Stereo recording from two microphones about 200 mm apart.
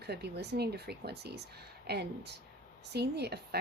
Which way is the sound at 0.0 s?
55° right (ahead or behind).